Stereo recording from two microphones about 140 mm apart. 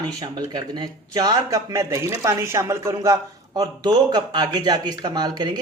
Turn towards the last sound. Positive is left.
turn(degrees=-30)  # may be behind; listen again after turning